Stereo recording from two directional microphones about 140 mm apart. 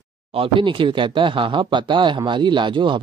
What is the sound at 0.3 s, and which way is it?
Speech, 40° right (ahead or behind).